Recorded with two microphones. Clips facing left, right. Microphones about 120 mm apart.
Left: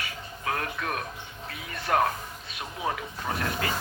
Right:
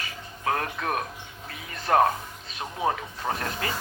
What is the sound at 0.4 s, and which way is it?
A man's voice, 35° right (ahead or behind).